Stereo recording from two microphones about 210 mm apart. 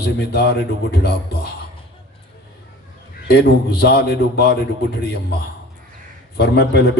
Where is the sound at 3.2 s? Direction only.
50° left (ahead or behind).